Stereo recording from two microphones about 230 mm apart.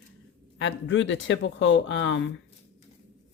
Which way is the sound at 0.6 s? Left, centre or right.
Left.